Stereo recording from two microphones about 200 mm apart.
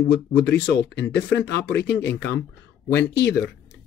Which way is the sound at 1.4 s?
60° left (ahead or behind).